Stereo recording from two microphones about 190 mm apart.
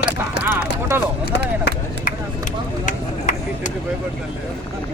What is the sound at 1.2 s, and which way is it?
Speech, 55° left (ahead or behind).